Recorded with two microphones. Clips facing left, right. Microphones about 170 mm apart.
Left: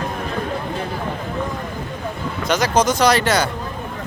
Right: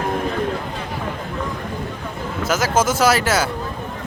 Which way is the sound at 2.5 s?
5° right (ahead or behind).